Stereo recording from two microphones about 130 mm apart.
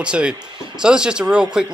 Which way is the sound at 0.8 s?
5° right (ahead or behind).